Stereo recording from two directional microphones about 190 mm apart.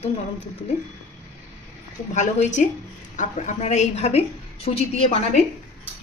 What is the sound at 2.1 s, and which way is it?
A woman's voice, 40° left (ahead or behind).